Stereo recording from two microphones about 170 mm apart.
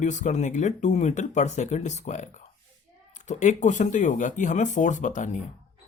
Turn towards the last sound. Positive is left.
turn(degrees=45)  # may be behind; listen again after turning